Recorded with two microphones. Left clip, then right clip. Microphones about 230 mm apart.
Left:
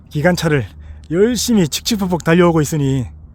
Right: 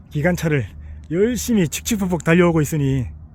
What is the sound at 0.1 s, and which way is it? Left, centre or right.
Speech, left.